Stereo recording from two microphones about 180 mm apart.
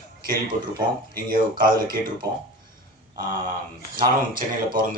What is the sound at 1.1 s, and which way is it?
Speech, 50° right (ahead or behind).